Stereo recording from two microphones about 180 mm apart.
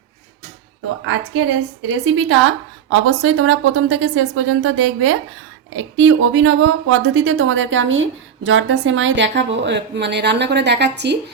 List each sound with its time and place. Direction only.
1.9 s a woman's voice: 90° right; by 11.2 s 70° right (ahead or behind)